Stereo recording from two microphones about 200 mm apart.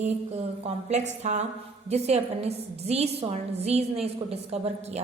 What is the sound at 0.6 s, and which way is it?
A woman's voice, 35° right (ahead or behind).